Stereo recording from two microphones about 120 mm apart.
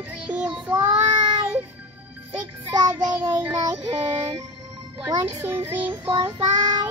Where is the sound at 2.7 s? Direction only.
35° right (ahead or behind).